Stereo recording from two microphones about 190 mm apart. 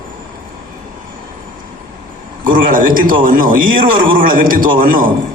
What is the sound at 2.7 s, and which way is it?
A man's voice, 45° right (ahead or behind).